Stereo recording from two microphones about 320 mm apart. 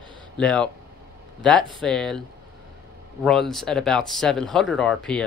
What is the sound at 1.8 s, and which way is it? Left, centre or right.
Speech, centre.